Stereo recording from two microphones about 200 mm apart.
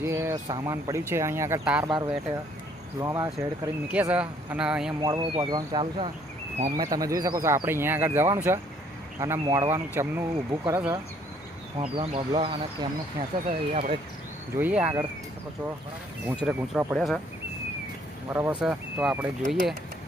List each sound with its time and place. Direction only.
0.0 s speech: 15° right (ahead or behind)
3.0 s speech: 15° right (ahead or behind)
4.9 s speech: 20° right (ahead or behind)
6.9 s speech: 15° right (ahead or behind)
11.8 s speech: 25° right (ahead or behind)
14.5 s speech: 10° right (ahead or behind)
16.2 s speech: 5° right (ahead or behind)
18.3 s speech: 10° right (ahead or behind)